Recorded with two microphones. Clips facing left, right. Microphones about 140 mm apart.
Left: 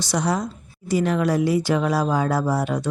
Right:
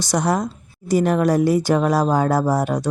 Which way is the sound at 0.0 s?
45° right (ahead or behind).